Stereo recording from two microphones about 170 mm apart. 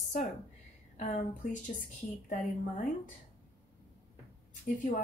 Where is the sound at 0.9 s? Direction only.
50° left (ahead or behind).